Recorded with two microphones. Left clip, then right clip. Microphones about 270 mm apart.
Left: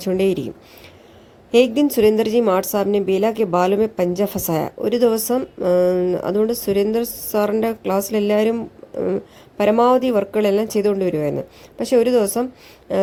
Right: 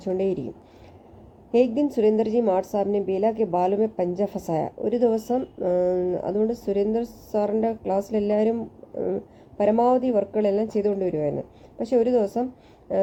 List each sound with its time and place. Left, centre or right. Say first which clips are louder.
0.0 s a woman's voice: left 6 dB; left